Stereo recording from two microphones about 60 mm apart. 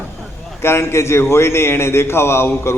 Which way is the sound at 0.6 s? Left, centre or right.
Left.